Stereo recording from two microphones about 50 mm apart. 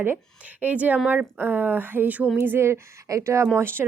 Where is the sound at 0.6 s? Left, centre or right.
Right.